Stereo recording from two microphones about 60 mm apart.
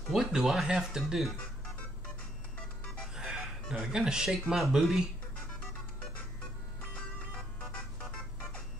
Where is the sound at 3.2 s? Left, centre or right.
Centre.